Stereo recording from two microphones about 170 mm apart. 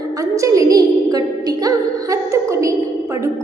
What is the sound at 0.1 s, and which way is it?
Music, 20° right (ahead or behind).